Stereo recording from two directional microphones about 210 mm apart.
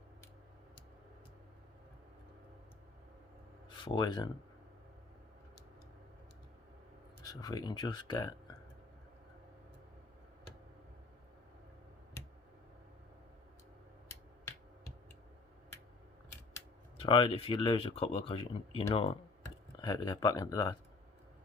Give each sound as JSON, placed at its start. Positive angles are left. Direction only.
{"t": 3.8, "sound": "speech", "side_deg": 20}
{"t": 7.4, "sound": "speech", "side_deg": 20}
{"t": 17.0, "sound": "speech", "side_deg": 25}